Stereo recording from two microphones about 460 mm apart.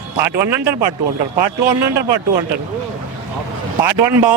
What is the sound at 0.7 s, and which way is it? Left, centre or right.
Speech, right.